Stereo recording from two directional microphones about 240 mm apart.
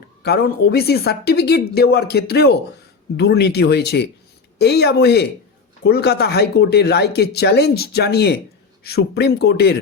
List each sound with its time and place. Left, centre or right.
0.2 s speech: left